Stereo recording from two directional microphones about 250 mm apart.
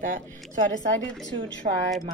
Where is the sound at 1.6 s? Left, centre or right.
Right.